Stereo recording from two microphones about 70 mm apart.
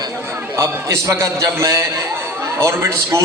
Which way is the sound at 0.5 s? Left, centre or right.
Right.